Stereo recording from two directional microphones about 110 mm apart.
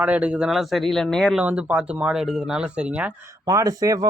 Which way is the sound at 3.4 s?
30° right (ahead or behind).